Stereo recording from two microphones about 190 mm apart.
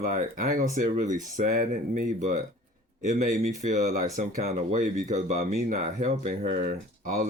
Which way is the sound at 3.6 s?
35° right (ahead or behind).